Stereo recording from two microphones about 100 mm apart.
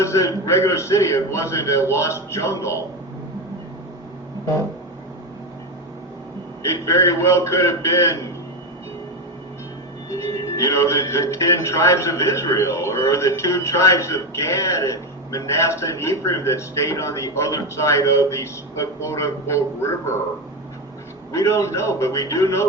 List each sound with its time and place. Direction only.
0.0 s speech: 30° left (ahead or behind)
6.6 s speech: 30° left (ahead or behind)
10.1 s speech: 30° left (ahead or behind)
21.3 s speech: 30° left (ahead or behind)